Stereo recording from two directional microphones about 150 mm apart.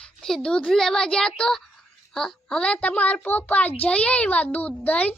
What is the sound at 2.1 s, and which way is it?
A child's voice, 5° left (ahead or behind).